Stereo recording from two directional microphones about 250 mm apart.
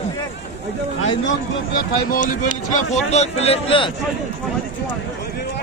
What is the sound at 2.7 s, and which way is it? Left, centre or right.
A man's voice, left.